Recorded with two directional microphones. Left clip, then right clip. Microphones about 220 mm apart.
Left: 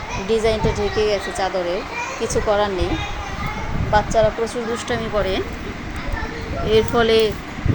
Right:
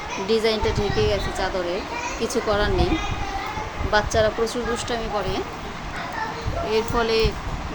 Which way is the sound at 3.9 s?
10° right (ahead or behind).